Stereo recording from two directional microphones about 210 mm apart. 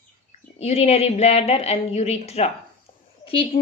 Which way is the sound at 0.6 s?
30° left (ahead or behind).